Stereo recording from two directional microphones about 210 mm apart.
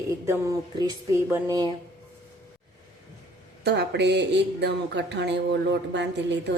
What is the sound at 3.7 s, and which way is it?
Speech, 55° right (ahead or behind).